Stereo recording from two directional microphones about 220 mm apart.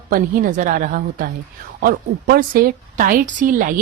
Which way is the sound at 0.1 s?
35° right (ahead or behind).